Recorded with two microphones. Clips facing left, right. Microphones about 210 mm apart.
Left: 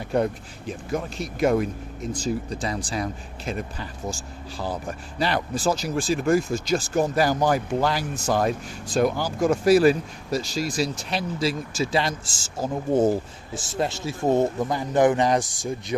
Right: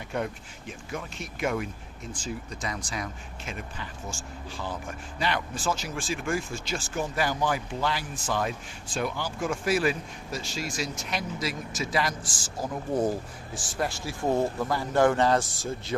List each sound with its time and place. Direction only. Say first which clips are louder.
0.1 s speech: left 8 dB; 35° left (ahead or behind); by 16.0 s 15° left (ahead or behind)